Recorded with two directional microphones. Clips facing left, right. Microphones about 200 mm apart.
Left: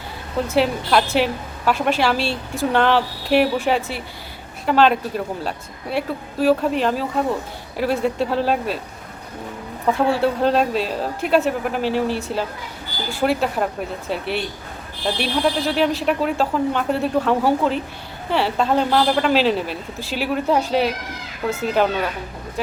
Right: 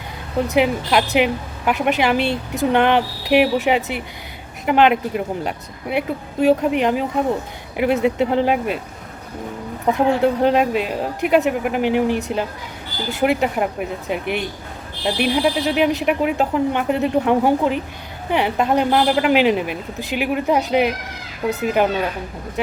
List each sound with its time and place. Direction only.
0.5 s a woman's voice: 15° right (ahead or behind)
9.8 s a woman's voice: 20° right (ahead or behind)